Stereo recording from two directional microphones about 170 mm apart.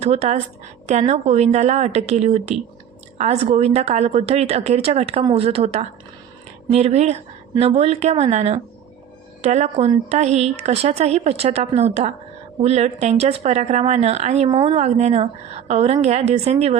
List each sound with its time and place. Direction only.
0.0 s speech: 40° right (ahead or behind)